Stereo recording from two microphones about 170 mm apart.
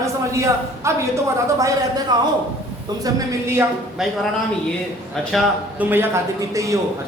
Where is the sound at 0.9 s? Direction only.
15° right (ahead or behind).